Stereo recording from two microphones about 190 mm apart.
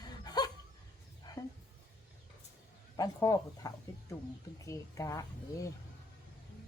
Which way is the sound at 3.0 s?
15° left (ahead or behind).